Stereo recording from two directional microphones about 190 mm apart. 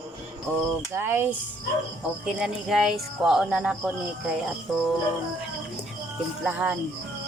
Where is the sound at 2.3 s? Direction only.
Centre (ahead or behind).